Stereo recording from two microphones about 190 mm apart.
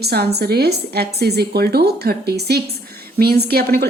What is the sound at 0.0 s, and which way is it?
A woman's voice, 55° right (ahead or behind).